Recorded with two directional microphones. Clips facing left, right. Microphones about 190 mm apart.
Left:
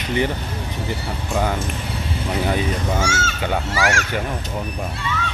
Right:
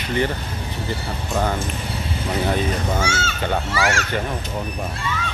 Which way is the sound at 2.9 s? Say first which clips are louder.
Left 1 dB; 45° left (ahead or behind).